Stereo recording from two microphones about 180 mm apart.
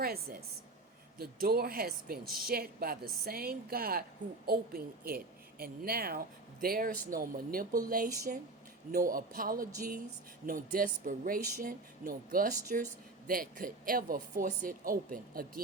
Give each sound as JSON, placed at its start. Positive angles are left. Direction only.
{"t": 0.0, "sound": "a woman's voice", "side_deg": -55}